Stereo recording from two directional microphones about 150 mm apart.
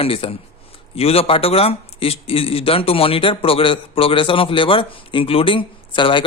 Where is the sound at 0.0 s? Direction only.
40° left (ahead or behind).